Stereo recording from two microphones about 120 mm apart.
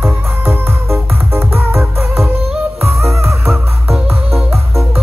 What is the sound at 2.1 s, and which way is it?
Music, 5° right (ahead or behind).